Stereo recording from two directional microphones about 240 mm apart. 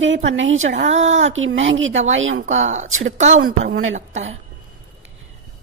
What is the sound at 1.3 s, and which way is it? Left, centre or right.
Speech, right.